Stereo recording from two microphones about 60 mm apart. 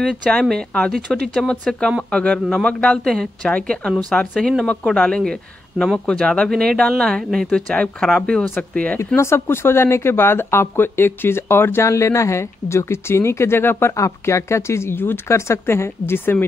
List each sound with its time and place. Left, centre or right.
0.3 s speech: centre
7.2 s speech: centre
7.5 s speech: centre
8.9 s speech: left
13.9 s speech: left